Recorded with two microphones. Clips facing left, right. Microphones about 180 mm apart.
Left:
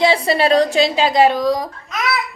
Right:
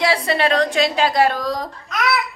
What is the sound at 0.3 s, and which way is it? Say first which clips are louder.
A woman's voice: left 4 dB; 35° left (ahead or behind).